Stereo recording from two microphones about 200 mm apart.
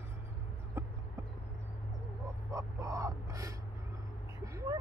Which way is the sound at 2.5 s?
15° right (ahead or behind).